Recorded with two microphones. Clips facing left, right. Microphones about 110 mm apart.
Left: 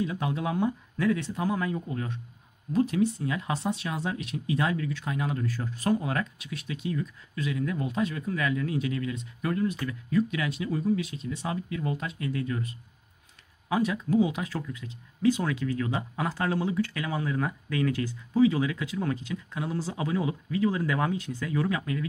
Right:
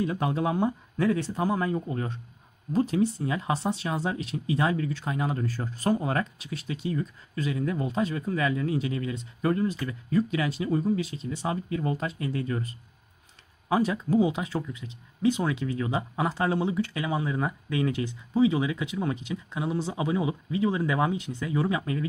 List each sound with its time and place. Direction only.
0.0 s speech: 45° right (ahead or behind); by 22.0 s 25° right (ahead or behind)